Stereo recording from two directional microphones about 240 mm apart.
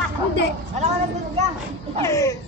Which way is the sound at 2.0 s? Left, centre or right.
Centre.